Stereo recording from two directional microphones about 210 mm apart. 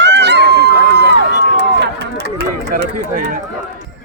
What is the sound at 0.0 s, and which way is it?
Run, 55° right (ahead or behind).